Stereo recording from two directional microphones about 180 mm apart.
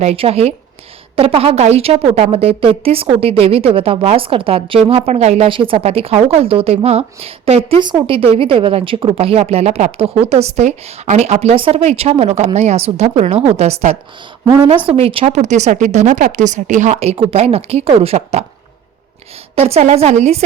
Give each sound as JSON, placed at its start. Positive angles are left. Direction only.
{"t": 0.0, "sound": "a woman's voice", "side_deg": -35}
{"t": 14.4, "sound": "a woman's voice", "side_deg": -20}
{"t": 14.8, "sound": "a woman's voice", "side_deg": -30}
{"t": 19.5, "sound": "a woman's voice", "side_deg": -35}